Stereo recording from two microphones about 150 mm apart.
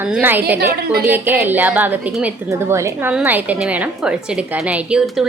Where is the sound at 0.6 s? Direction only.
90° right.